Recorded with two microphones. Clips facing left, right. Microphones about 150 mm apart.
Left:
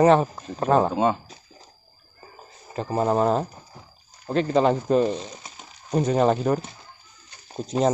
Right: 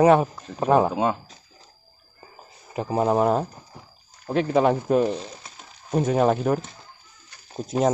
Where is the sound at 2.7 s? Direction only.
10° right (ahead or behind).